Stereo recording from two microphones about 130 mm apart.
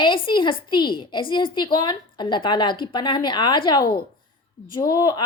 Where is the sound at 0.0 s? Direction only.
35° left (ahead or behind).